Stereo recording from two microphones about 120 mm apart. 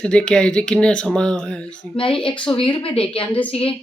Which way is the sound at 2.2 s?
45° left (ahead or behind).